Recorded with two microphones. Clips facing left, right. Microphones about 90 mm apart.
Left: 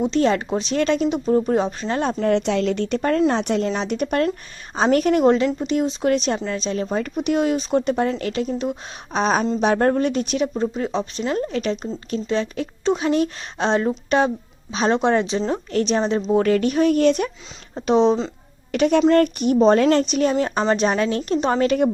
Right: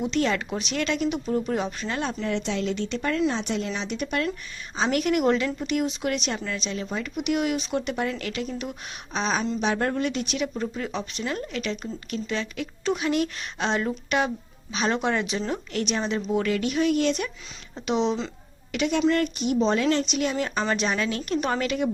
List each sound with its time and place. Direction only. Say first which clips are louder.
0.0 s a woman's voice: left 6 dB; 35° left (ahead or behind)
2.3 s speech: left 7 dB; 60° left (ahead or behind); by 3.3 s 40° left (ahead or behind)
3.3 s a woman's voice: left 7 dB; 55° left (ahead or behind); by 8.7 s 30° left (ahead or behind)
9.1 s a woman's voice: left 6 dB; 45° left (ahead or behind)
10.5 s a woman's voice: left 7 dB; 25° left (ahead or behind)